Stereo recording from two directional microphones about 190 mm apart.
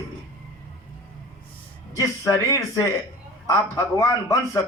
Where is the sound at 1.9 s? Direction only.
15° left (ahead or behind).